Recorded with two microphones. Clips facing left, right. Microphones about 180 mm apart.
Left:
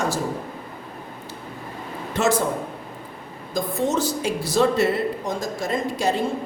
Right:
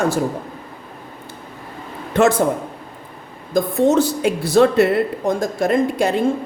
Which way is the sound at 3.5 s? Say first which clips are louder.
Right 8 dB; 60° right (ahead or behind).